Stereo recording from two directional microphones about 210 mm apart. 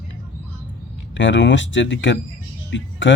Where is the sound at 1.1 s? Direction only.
60° left (ahead or behind).